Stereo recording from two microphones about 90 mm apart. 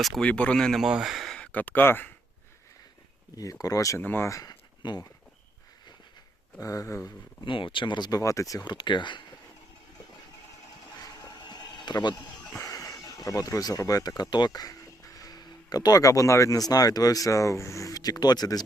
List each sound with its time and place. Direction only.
0.0 s speech: centre (ahead or behind)
0.3 s speech: 15° left (ahead or behind)
0.8 s speech: 5° right (ahead or behind)
1.4 s speech: 20° left (ahead or behind)
3.3 s speech: 40° left (ahead or behind)
4.0 s speech: 20° left (ahead or behind)
4.3 s speech: 40° left (ahead or behind)
4.8 s speech: 55° left (ahead or behind)
6.6 s speech: 35° left (ahead or behind)
7.4 s speech: 70° left (ahead or behind); by 8.2 s 55° left (ahead or behind)
8.2 s speech: 35° left (ahead or behind)
8.6 s speech: 55° left (ahead or behind)
11.0 s a sound: 45° left (ahead or behind)
12.5 s speech: 40° left (ahead or behind)